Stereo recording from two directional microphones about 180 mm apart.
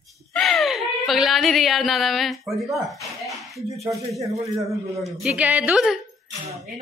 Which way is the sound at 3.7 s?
15° right (ahead or behind).